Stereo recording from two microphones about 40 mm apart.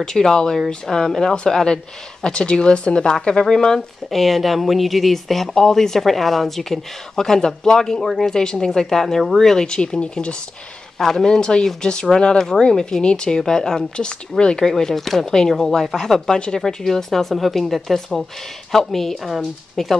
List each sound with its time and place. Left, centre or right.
0.0 s speech: centre
4.1 s speech: centre; by 10.3 s left
11.0 s speech: centre
14.7 s speech: centre
16.3 s speech: left
16.6 s speech: centre